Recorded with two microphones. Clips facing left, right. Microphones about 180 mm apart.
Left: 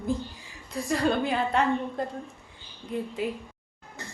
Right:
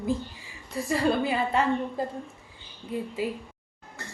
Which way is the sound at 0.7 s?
5° right (ahead or behind).